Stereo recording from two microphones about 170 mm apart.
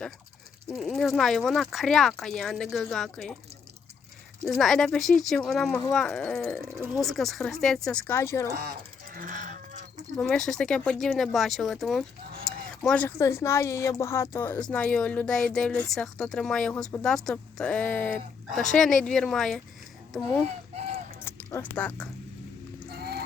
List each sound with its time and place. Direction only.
0.7 s speech: centre (ahead or behind)
4.4 s speech: centre (ahead or behind); by 8.4 s 15° left (ahead or behind)
9.1 s livestock: 50° right (ahead or behind)
10.2 s speech: 5° left (ahead or behind)
21.2 s speech: 10° left (ahead or behind)
22.9 s goose: 70° right (ahead or behind)